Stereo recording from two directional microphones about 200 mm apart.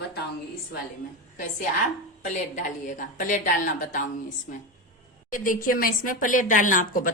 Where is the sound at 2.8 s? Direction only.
40° left (ahead or behind).